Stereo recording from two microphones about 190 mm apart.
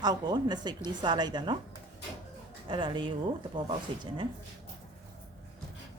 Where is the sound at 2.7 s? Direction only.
25° right (ahead or behind).